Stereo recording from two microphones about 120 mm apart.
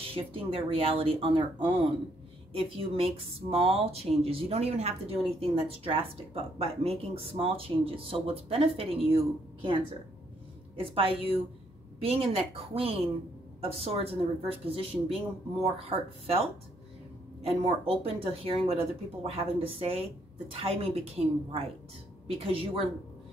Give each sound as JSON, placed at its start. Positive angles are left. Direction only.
{"t": 0.1, "sound": "speech", "side_deg": -50}
{"t": 10.8, "sound": "speech", "side_deg": -50}